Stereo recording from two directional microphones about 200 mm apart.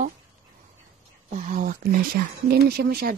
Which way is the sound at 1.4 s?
40° right (ahead or behind).